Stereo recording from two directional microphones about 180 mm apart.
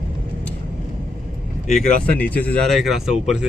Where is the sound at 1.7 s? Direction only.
10° left (ahead or behind).